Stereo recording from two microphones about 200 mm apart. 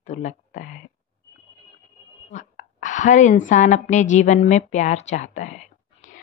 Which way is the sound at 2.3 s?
40° left (ahead or behind).